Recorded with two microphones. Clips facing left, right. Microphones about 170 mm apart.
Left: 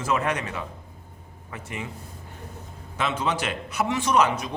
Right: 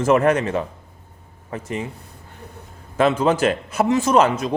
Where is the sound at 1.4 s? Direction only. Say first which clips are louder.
Right 8 dB; 35° right (ahead or behind).